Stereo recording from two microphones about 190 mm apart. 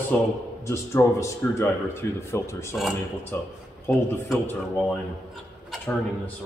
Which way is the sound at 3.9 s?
10° left (ahead or behind).